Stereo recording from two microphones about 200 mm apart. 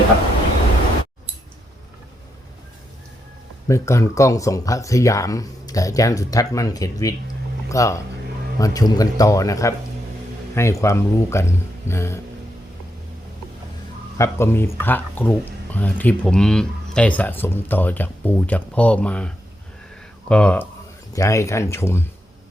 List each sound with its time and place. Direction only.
3.7 s speech: 15° left (ahead or behind)
14.2 s speech: 10° left (ahead or behind)